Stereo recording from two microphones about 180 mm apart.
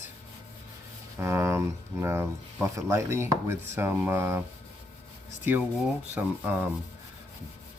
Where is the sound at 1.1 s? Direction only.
15° right (ahead or behind).